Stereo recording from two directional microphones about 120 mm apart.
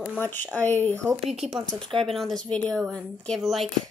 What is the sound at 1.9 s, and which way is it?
Speech, 50° right (ahead or behind).